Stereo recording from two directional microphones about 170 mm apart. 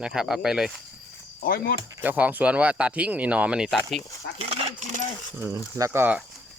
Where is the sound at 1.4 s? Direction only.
60° left (ahead or behind).